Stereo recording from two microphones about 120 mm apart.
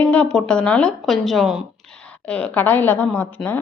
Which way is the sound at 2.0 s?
10° left (ahead or behind).